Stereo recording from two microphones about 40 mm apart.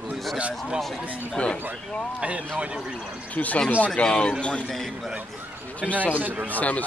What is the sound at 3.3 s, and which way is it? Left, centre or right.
Speech, left.